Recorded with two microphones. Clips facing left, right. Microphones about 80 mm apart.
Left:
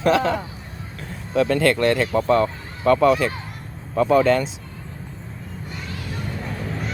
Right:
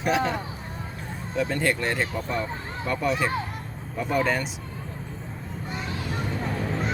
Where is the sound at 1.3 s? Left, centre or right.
Left.